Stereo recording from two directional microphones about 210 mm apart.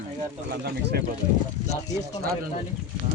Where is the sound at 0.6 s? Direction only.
50° right (ahead or behind).